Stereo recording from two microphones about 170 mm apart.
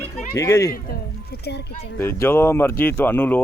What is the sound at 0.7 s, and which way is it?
Speech, 60° left (ahead or behind).